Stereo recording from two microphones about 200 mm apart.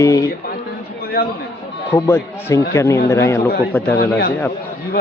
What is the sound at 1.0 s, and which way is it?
Chatter, 50° left (ahead or behind).